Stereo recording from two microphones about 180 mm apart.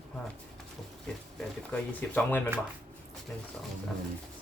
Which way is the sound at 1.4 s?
10° left (ahead or behind).